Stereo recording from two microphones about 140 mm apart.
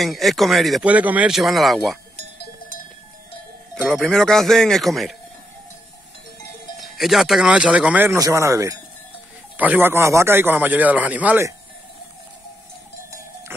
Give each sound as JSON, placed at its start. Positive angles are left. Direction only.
{"t": 0.0, "sound": "speech", "side_deg": 0}
{"t": 0.8, "sound": "speech", "side_deg": -10}
{"t": 3.7, "sound": "speech", "side_deg": 0}
{"t": 6.8, "sound": "speech", "side_deg": 0}
{"t": 8.2, "sound": "a man's voice", "side_deg": -20}
{"t": 13.5, "sound": "music", "side_deg": -15}